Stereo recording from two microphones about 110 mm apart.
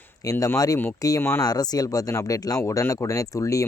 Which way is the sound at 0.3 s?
30° left (ahead or behind).